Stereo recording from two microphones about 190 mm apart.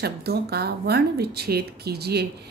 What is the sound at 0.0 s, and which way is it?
Speech, 55° right (ahead or behind).